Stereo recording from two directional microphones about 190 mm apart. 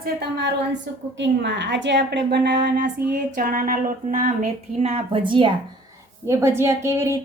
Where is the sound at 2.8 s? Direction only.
50° right (ahead or behind); by 5.5 s 25° right (ahead or behind).